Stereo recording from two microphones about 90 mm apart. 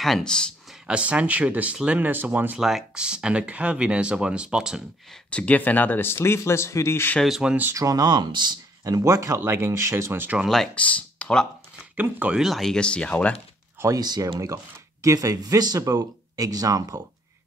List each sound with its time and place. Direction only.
0.0 s speech: 5° left (ahead or behind)
0.8 s speech: 15° right (ahead or behind)
2.6 s speech: 5° right (ahead or behind)
5.3 s speech: 15° left (ahead or behind)
7.2 s speech: 5° right (ahead or behind)
7.7 s speech: 40° right (ahead or behind); by 8.5 s 60° right (ahead or behind)
8.8 s speech: 40° right (ahead or behind)
10.4 s speech: 5° left (ahead or behind)
10.7 s speech: 15° left (ahead or behind)
12.0 s speech: 15° right (ahead or behind)
12.4 s speech: centre (ahead or behind)
13.9 s speech: 45° right (ahead or behind)